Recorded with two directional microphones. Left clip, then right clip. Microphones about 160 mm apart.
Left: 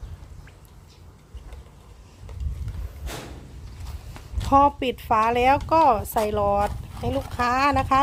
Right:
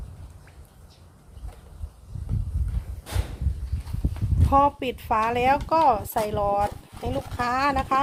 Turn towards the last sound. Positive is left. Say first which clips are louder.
# left 3 dB
turn(degrees=25)  # may be behind; listen again after turning